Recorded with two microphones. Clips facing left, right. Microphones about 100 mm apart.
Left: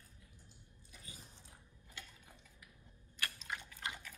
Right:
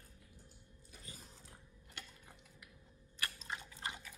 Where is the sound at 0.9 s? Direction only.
40° right (ahead or behind).